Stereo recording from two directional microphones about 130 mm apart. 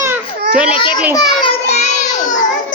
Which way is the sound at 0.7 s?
40° left (ahead or behind).